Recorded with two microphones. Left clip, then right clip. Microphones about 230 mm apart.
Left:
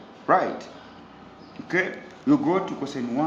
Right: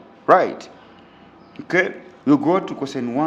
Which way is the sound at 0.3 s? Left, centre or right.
Right.